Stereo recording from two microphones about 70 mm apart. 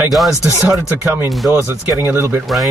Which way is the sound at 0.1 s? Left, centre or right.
Centre.